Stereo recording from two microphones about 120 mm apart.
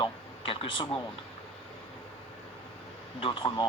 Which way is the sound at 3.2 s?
45° left (ahead or behind).